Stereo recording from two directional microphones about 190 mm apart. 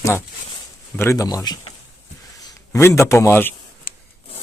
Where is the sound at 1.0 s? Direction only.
15° left (ahead or behind).